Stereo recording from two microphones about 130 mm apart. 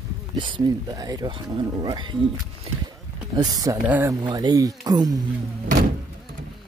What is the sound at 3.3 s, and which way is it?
Speech, 30° right (ahead or behind).